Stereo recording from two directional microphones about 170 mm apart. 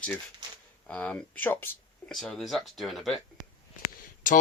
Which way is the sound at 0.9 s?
5° left (ahead or behind).